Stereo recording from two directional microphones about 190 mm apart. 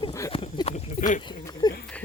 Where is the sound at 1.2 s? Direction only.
25° left (ahead or behind).